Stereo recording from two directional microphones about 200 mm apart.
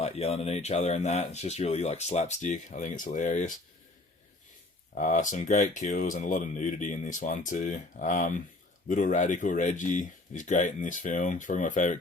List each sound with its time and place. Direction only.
0.0 s speech: 30° left (ahead or behind)
4.9 s speech: 40° left (ahead or behind)